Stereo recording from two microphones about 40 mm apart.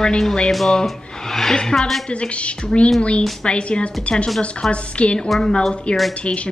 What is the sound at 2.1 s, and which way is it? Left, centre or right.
A woman's voice, left.